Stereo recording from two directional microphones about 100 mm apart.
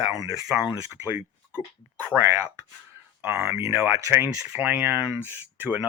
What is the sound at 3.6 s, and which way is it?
Speech, 25° right (ahead or behind).